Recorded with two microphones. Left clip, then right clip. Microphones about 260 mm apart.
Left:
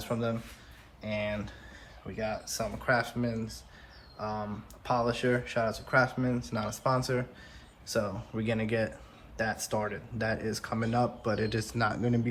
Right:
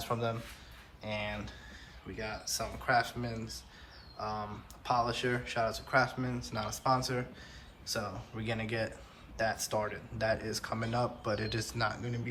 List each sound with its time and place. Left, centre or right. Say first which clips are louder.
0.0 s speech: left 2 dB; centre